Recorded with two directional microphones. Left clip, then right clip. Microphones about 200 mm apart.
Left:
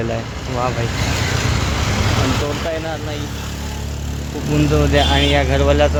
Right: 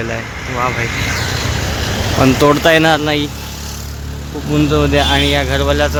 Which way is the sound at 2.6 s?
35° right (ahead or behind).